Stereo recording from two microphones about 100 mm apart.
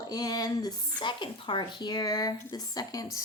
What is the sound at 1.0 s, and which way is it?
Speech, 55° left (ahead or behind).